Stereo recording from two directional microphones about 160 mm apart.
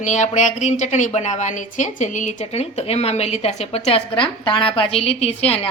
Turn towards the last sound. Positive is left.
turn(degrees=40)  # may be behind; listen again after turning